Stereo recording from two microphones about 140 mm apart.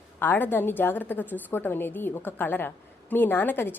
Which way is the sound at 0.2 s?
15° left (ahead or behind).